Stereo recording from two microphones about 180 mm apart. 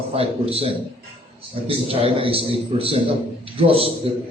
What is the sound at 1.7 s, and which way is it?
A man's voice, 30° right (ahead or behind).